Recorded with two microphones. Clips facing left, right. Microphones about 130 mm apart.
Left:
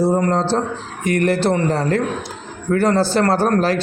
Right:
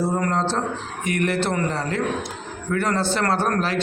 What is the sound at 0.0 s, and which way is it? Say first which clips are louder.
A man's voice: left 5 dB; 30° left (ahead or behind).